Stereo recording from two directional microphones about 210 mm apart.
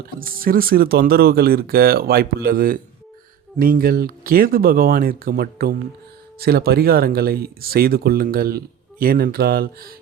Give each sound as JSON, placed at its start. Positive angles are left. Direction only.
{"t": 0.2, "sound": "speech", "side_deg": -45}